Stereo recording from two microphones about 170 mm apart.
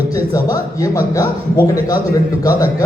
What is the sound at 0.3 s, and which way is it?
A man's voice, 20° left (ahead or behind).